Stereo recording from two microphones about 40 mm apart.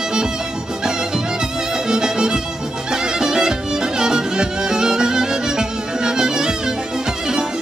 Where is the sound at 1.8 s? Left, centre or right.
Centre.